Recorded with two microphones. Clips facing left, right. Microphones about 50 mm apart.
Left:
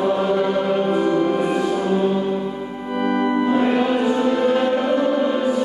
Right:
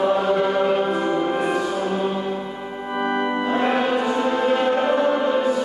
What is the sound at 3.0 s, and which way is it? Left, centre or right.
Music, centre.